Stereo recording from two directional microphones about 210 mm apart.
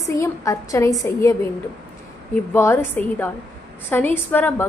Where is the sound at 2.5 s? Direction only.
10° left (ahead or behind).